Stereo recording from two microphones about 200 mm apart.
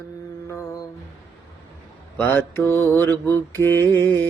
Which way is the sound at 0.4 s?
15° left (ahead or behind).